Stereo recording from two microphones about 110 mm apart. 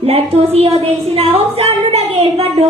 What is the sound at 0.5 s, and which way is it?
A woman's voice, 65° right (ahead or behind).